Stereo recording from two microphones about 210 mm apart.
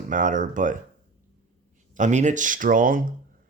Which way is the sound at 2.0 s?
35° right (ahead or behind).